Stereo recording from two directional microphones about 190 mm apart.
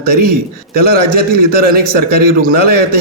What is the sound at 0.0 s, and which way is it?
A man's voice, 50° right (ahead or behind).